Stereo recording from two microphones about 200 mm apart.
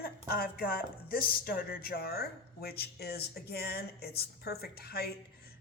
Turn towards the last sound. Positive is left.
turn(degrees=50)  # may be behind; listen again after turning